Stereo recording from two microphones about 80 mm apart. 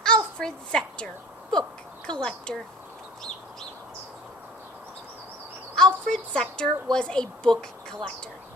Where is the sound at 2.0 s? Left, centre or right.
Centre.